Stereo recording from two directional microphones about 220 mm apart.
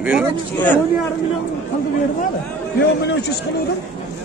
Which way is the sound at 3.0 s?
50° left (ahead or behind).